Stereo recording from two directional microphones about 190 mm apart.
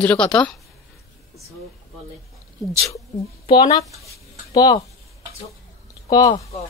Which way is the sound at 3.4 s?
25° left (ahead or behind).